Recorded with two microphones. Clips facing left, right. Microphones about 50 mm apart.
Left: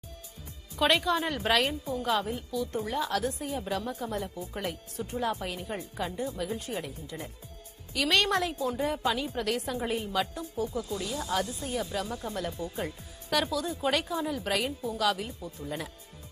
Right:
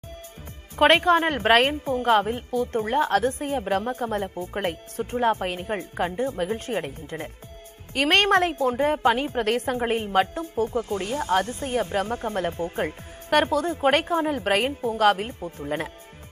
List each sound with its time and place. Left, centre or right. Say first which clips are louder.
0.7 s a woman's voice: right 8 dB; right